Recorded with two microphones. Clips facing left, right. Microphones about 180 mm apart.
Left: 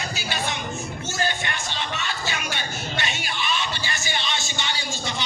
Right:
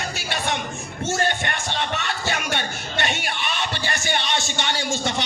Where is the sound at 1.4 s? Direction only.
55° right (ahead or behind).